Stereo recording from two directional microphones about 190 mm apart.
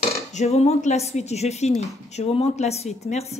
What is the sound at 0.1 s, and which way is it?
Speech, 35° left (ahead or behind).